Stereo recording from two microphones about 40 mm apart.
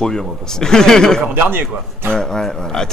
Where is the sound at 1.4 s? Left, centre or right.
Right.